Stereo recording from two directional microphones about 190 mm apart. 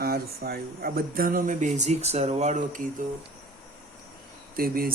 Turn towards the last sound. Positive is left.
turn(degrees=-50)  # may be behind; listen again after turning